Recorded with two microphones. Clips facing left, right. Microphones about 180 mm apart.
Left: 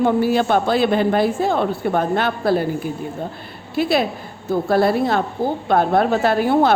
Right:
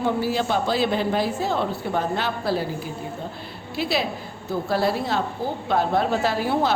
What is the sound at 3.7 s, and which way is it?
A woman's voice, 50° left (ahead or behind).